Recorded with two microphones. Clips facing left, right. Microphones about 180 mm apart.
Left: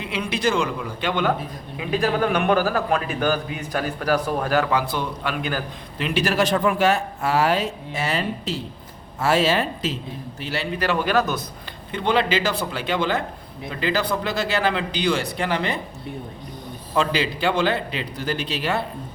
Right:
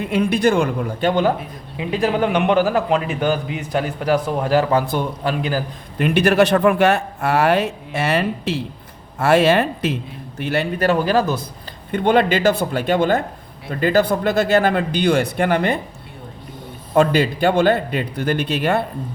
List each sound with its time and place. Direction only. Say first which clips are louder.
0.0 s a man's voice: right 7 dB; 50° right (ahead or behind)
1.8 s a man's voice: right 3 dB; 25° right (ahead or behind)
4.7 s a man's voice: right 4 dB; 50° right (ahead or behind)
5.3 s a man's voice: right 5 dB; 30° right (ahead or behind)
6.0 s a man's voice: right 7 dB; 55° right (ahead or behind); by 11.3 s 30° right (ahead or behind)
11.9 s a man's voice: right 5 dB; 50° right (ahead or behind)
16.9 s a man's voice: right 7 dB; 50° right (ahead or behind)